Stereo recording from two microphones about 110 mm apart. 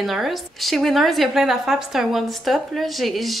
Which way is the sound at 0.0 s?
Centre (ahead or behind).